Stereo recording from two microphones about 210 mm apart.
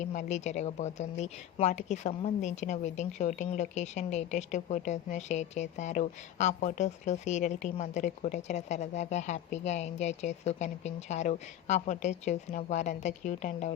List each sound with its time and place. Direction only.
0.0 s a woman's voice: 35° left (ahead or behind)